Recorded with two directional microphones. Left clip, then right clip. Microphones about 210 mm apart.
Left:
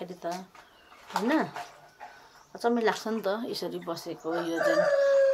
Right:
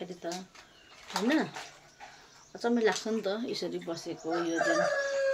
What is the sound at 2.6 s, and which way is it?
Speech, 5° left (ahead or behind).